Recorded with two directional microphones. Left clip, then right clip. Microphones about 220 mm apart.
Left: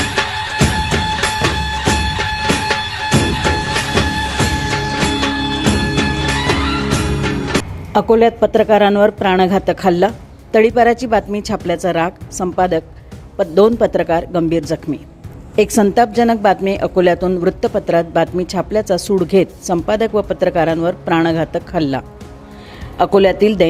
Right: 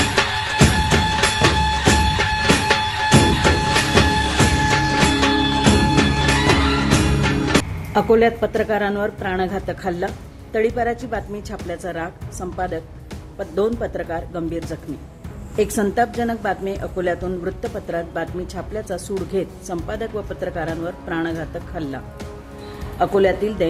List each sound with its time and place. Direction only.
0.0 s music: centre (ahead or behind)
7.9 s a woman's voice: 30° left (ahead or behind)